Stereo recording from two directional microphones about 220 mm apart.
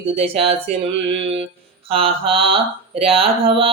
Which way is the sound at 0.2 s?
25° right (ahead or behind).